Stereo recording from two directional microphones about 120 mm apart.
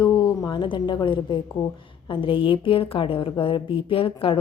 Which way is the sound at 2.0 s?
45° left (ahead or behind).